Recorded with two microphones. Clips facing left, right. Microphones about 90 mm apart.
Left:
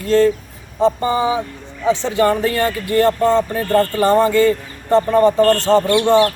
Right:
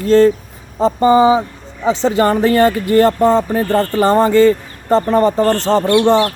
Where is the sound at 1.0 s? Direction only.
90° right.